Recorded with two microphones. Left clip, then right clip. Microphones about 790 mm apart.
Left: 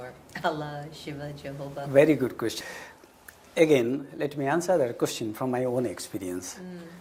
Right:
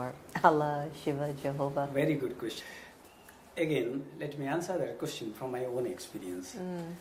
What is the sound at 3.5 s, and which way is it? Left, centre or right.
Speech, left.